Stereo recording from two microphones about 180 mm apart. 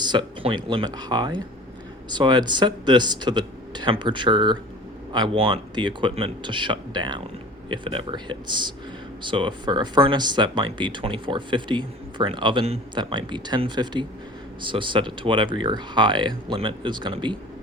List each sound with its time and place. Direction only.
0.0 s speech: 25° right (ahead or behind)